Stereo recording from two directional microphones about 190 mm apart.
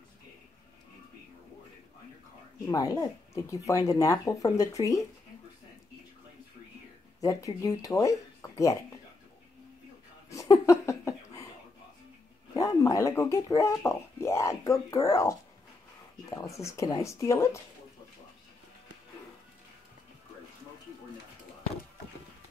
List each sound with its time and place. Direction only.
2.6 s speech: 20° left (ahead or behind)
7.2 s speech: 15° left (ahead or behind)
10.3 s a sound: 15° left (ahead or behind)
12.5 s speech: 15° left (ahead or behind)